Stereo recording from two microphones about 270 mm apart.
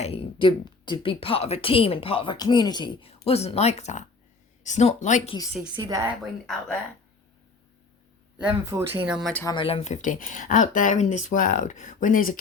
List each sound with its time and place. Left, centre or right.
0.0 s speech: left
5.7 s a woman's voice: centre
8.4 s speech: centre; by 12.4 s left